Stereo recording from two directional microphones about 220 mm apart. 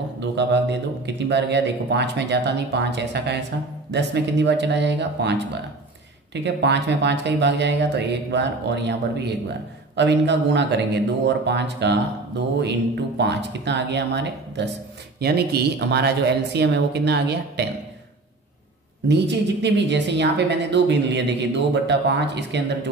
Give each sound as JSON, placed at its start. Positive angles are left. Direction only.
{"t": 0.4, "sound": "speech", "side_deg": -50}
{"t": 19.0, "sound": "speech", "side_deg": -50}